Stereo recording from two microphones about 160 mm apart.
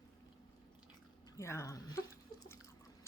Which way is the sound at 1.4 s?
15° left (ahead or behind).